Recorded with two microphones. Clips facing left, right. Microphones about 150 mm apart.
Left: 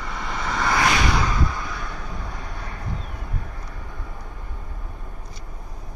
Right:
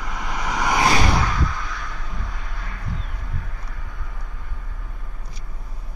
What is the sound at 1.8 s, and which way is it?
Vehicle, 25° left (ahead or behind).